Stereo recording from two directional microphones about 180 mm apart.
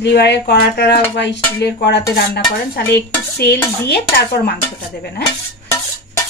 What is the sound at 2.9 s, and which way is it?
A woman's voice, 70° left (ahead or behind).